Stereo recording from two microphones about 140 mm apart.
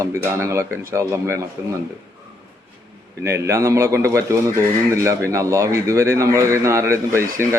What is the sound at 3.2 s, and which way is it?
A man's voice, 20° right (ahead or behind).